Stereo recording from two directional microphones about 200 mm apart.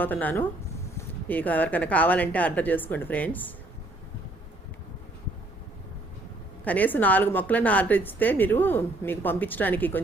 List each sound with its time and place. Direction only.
0.0 s a woman's voice: 10° left (ahead or behind)
6.7 s a woman's voice: 10° left (ahead or behind)